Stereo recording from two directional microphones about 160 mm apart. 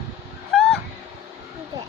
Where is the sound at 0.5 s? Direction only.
5° left (ahead or behind).